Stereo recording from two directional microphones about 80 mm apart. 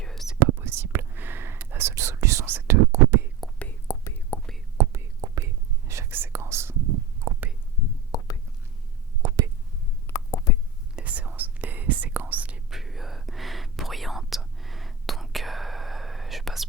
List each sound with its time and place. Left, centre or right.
0.0 s whispering: centre
0.3 s whispering: right
3.9 s whispering: left
4.3 s whispering: left
4.8 s whispering: right
8.1 s whispering: left
9.2 s whispering: right
10.1 s a sound: left
10.9 s whispering: centre
12.7 s whispering: centre